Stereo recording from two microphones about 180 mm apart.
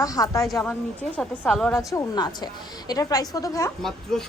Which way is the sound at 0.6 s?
10° left (ahead or behind).